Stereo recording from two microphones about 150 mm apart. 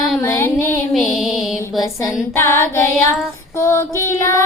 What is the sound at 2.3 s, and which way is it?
Child singing, 20° left (ahead or behind).